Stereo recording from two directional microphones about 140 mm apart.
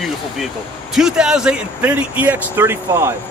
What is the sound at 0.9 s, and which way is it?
Speech, 5° right (ahead or behind).